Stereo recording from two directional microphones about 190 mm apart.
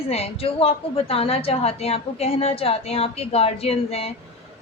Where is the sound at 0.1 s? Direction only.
30° left (ahead or behind).